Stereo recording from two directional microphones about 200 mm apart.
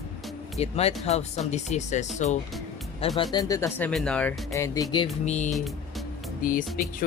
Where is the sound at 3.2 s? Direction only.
20° left (ahead or behind).